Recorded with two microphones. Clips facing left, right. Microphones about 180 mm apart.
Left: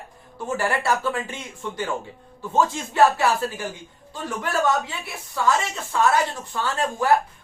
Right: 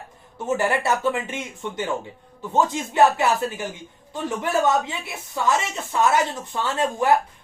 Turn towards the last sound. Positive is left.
turn(degrees=-20)  # may be behind; listen again after turning